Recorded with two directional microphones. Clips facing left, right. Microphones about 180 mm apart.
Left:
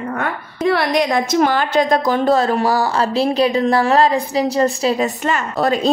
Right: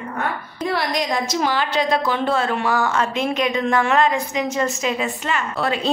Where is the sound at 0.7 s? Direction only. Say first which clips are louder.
Left 6 dB; 60° left (ahead or behind).